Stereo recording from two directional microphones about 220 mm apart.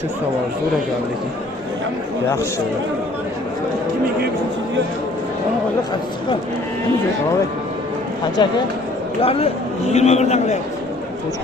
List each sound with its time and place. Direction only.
8.4 s a man's voice: 20° left (ahead or behind)